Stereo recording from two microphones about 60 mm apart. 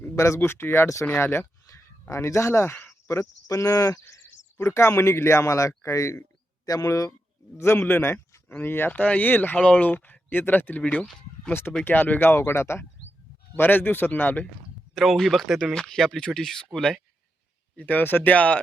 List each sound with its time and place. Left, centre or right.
0.3 s speech: left
1.6 s a sound: left
3.1 s speech: left
4.5 s speech: left
6.7 s a man's voice: left
7.6 s speech: left
8.9 s speech: left
9.6 s speech: centre
11.9 s speech: left
12.3 s speech: left
13.6 s speech: left
14.9 s speech: centre
17.7 s speech: left